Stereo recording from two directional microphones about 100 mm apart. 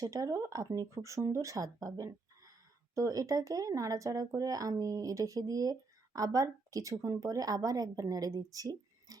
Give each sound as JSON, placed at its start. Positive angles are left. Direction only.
{"t": 0.0, "sound": "speech", "side_deg": -35}